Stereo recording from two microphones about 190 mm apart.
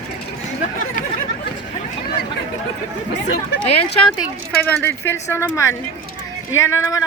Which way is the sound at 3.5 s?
90° left.